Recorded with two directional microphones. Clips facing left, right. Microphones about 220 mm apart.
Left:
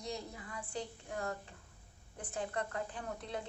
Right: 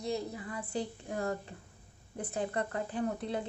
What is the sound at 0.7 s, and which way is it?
A woman's voice, 35° right (ahead or behind).